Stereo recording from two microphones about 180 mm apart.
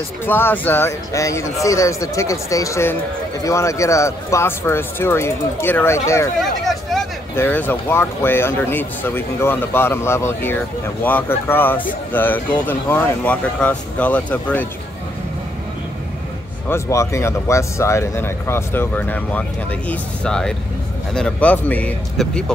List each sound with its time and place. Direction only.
0.2 s speech: 10° left (ahead or behind)
6.6 s vehicle: centre (ahead or behind)
7.3 s speech: 10° left (ahead or behind)
16.6 s speech: 15° left (ahead or behind)